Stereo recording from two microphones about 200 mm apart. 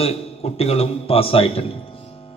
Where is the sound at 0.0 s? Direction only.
30° left (ahead or behind).